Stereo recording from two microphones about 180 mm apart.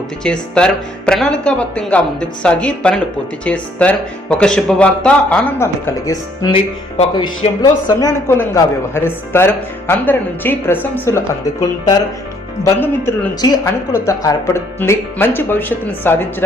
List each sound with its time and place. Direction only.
0.3 s speech: 5° left (ahead or behind)
12.6 s speech: 15° left (ahead or behind)